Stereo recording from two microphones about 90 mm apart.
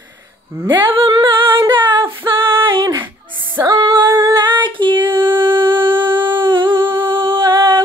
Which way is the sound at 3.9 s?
25° right (ahead or behind).